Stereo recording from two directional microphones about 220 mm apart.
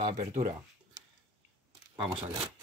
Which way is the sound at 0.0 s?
35° right (ahead or behind).